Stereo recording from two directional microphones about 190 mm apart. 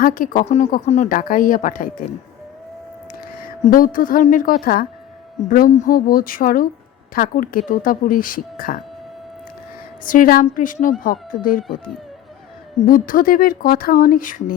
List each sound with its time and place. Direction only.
0.0 s speech: 45° left (ahead or behind)
3.6 s speech: 45° left (ahead or behind)
10.0 s speech: 45° left (ahead or behind)
12.8 s speech: 45° left (ahead or behind)